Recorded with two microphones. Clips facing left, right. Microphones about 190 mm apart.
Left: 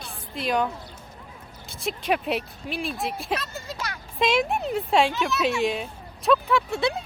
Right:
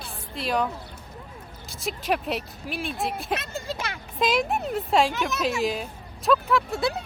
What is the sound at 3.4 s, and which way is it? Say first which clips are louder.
Speech: right 3 dB; 30° right (ahead or behind).